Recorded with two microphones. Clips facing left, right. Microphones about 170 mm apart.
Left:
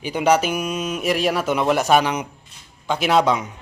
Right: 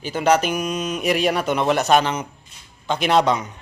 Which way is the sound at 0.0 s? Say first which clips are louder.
Even; 15° left (ahead or behind).